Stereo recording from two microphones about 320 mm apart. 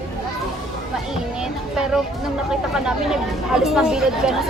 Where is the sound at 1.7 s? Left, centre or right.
Centre.